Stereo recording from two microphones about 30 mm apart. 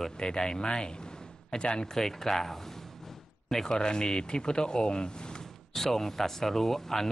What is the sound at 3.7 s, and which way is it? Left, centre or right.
Speech, left.